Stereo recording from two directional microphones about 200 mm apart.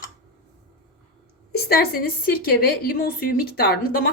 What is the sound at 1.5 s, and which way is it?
A woman's voice, 50° left (ahead or behind).